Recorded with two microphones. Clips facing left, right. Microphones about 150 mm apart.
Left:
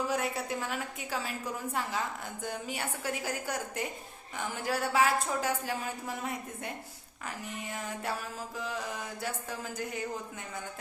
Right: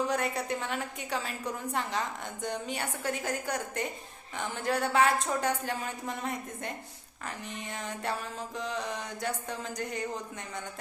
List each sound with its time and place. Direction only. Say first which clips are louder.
0.1 s a woman's voice: right 1 dB; 5° left (ahead or behind)